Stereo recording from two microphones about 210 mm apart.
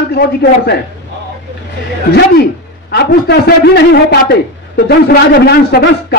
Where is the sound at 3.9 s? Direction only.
55° left (ahead or behind).